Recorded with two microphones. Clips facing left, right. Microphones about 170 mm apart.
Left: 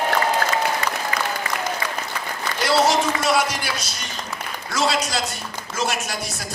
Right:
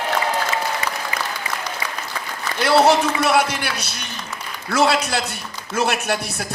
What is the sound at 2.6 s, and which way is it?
Speech, 60° right (ahead or behind).